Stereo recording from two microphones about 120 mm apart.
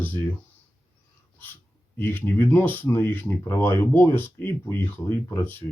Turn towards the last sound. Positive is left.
turn(degrees=20)  # may be behind; listen again after turning